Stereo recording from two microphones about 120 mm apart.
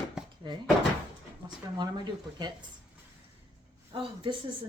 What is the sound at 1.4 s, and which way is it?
Speech, 35° right (ahead or behind).